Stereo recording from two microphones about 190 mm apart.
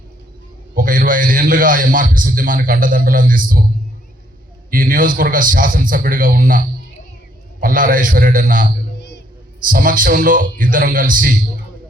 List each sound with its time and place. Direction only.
0.7 s a man's voice: 45° right (ahead or behind)
4.7 s a man's voice: 45° right (ahead or behind)
7.6 s a man's voice: 45° right (ahead or behind)
9.0 s a sound: 60° left (ahead or behind)
9.6 s a man's voice: 45° right (ahead or behind)